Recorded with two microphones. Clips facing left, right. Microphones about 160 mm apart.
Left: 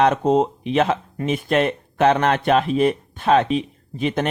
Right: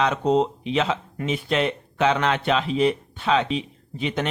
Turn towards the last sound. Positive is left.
turn(degrees=45)  # may be behind; listen again after turning